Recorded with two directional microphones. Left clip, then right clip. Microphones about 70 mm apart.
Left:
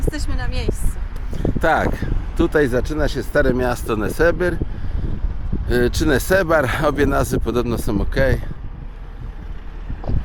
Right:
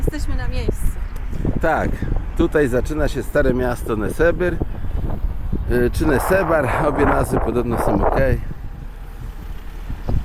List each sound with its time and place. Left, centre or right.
0.0 s a woman's voice: left
3.5 s speech: left
5.6 s speech: left